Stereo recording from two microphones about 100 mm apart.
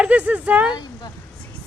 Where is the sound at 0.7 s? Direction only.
45° left (ahead or behind).